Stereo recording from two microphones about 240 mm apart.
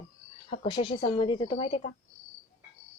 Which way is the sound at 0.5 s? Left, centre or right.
Left.